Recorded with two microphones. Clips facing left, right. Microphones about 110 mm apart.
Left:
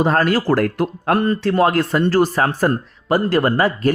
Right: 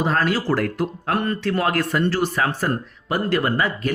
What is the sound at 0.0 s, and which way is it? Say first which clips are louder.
Speech: left 5 dB; 45° left (ahead or behind).